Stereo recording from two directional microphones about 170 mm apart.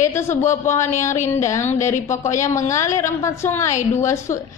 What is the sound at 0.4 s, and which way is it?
A woman's voice, 15° left (ahead or behind).